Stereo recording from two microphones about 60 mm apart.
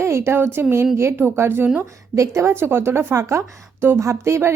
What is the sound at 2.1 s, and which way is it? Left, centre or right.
Speech, right.